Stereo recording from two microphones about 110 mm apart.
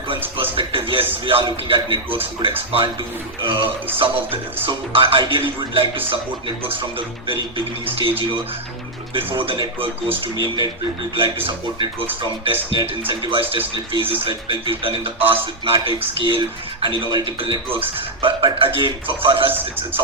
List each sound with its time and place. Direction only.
0.5 s speech: 55° right (ahead or behind)
7.3 s speech: 55° right (ahead or behind)
9.1 s speech: 50° right (ahead or behind)
19.5 s speech: 15° right (ahead or behind)